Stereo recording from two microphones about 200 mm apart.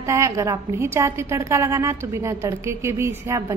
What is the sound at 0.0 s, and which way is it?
A woman's voice, 15° right (ahead or behind).